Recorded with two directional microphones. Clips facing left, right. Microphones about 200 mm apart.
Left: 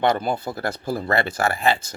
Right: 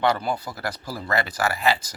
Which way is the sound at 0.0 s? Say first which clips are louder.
Left 2 dB; 20° left (ahead or behind).